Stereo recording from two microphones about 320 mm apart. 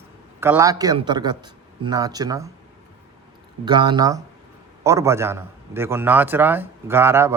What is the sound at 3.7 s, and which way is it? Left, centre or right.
A man's voice, centre.